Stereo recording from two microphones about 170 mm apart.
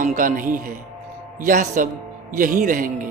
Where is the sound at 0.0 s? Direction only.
50° right (ahead or behind).